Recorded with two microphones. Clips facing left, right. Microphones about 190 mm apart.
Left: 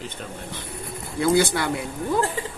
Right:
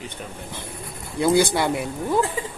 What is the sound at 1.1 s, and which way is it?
Speech, 20° right (ahead or behind).